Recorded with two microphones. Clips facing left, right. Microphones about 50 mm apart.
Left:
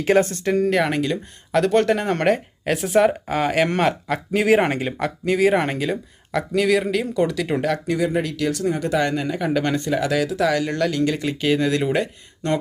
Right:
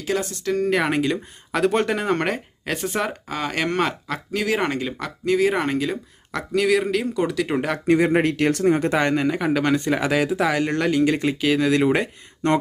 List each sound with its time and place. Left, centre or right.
0.0 s speech: left
0.6 s speech: centre
4.4 s speech: centre
7.9 s speech: right; by 9.8 s centre
9.8 s speech: right
11.3 s speech: centre
11.7 s speech: centre